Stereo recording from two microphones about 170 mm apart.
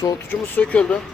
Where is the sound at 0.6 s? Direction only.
5° left (ahead or behind).